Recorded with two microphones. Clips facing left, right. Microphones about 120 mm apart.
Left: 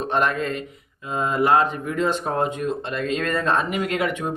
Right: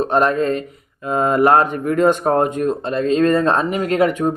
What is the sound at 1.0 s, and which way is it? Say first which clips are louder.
Speech: right 6 dB; 50° right (ahead or behind).